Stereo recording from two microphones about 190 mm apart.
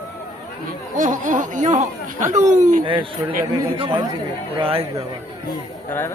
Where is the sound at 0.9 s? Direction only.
45° right (ahead or behind).